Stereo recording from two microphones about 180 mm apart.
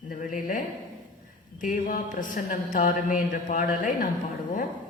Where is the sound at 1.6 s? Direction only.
45° left (ahead or behind).